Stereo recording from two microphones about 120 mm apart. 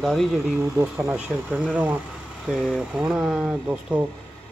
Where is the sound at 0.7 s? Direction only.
25° right (ahead or behind).